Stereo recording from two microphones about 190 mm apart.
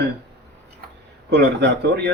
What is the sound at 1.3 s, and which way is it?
Speech, 60° right (ahead or behind).